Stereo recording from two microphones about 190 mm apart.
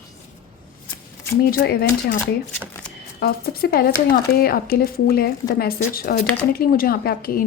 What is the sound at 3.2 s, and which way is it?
A woman's voice, 55° left (ahead or behind).